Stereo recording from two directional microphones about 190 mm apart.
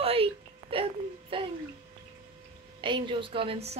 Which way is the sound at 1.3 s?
30° right (ahead or behind).